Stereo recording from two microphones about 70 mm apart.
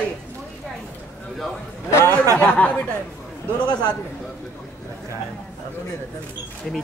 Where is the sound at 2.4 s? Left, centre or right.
Centre.